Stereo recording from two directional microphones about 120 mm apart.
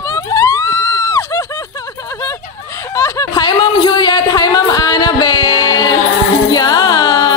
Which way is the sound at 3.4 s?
40° left (ahead or behind).